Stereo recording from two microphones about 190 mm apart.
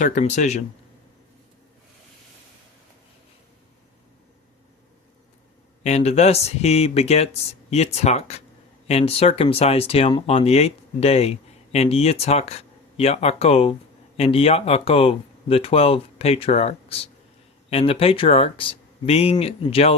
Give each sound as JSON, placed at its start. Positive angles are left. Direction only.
{"t": 0.0, "sound": "speech", "side_deg": 40}
{"t": 5.8, "sound": "speech", "side_deg": 35}